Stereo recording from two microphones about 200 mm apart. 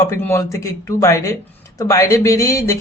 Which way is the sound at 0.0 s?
15° left (ahead or behind).